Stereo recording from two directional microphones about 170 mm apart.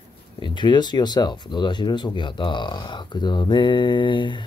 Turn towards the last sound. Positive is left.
turn(degrees=30)  # may be behind; listen again after turning